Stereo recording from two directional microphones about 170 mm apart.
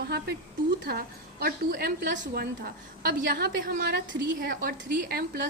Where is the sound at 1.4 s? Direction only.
65° right (ahead or behind).